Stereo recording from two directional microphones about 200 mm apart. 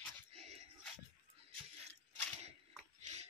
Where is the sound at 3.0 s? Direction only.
35° right (ahead or behind).